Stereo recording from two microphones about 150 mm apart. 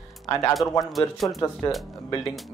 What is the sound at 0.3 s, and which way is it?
Speech, 20° left (ahead or behind).